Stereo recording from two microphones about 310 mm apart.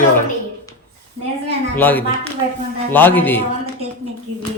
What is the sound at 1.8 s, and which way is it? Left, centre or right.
Speech, centre.